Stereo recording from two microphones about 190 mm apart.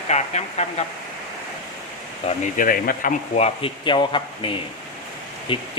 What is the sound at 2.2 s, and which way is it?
Speech, 45° left (ahead or behind).